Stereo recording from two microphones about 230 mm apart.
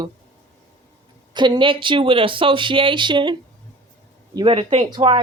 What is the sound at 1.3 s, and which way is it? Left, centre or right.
Speech, centre.